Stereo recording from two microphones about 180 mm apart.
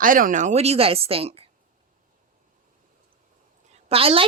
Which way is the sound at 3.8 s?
30° right (ahead or behind).